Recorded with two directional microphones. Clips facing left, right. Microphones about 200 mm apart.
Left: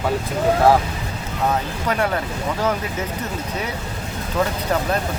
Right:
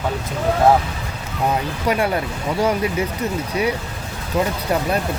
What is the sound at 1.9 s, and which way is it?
Speech, 10° right (ahead or behind).